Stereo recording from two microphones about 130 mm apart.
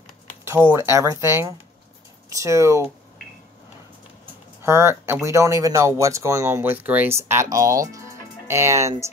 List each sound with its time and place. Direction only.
0.5 s speech: 15° right (ahead or behind)
4.6 s speech: 20° right (ahead or behind)